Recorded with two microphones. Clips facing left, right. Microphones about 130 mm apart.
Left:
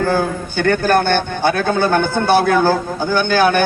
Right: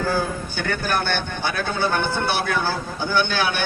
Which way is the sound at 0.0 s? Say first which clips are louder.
Left 6 dB; 55° left (ahead or behind).